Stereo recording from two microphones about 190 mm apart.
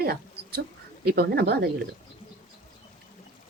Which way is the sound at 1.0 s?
55° right (ahead or behind).